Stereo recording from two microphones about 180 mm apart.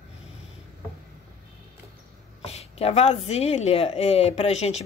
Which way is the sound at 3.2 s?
35° left (ahead or behind).